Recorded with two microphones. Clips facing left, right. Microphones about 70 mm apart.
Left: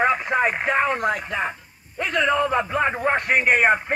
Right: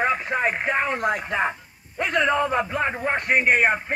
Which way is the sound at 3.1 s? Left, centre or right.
Centre.